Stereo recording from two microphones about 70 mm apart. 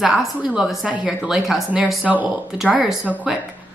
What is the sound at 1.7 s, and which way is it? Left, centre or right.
Speech, centre.